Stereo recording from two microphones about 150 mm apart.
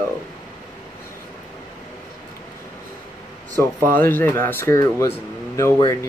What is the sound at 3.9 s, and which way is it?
Speech, 10° left (ahead or behind).